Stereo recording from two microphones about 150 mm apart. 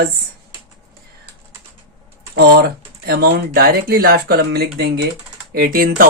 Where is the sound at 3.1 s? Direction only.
90° right.